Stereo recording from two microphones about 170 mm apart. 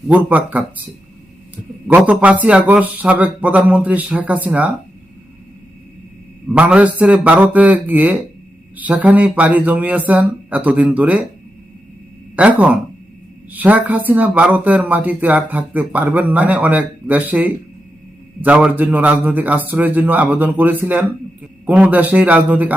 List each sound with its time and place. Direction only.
0.1 s speech: 10° right (ahead or behind)
2.0 s speech: 10° right (ahead or behind)
6.5 s speech: 10° right (ahead or behind)
12.4 s speech: 10° right (ahead or behind)